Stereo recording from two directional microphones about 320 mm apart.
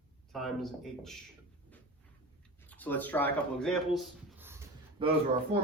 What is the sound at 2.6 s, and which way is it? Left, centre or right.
Speech, centre.